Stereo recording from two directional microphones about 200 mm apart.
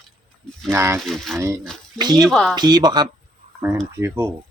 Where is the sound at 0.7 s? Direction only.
10° right (ahead or behind).